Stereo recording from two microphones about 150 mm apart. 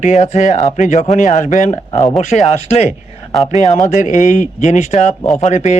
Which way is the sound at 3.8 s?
60° left (ahead or behind).